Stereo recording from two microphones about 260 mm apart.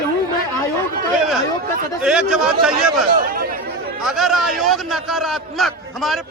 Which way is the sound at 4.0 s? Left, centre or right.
Centre.